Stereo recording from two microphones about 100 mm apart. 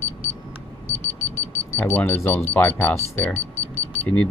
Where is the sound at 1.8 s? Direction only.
15° left (ahead or behind).